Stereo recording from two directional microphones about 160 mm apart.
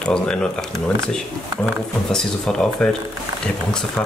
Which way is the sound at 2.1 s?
5° left (ahead or behind).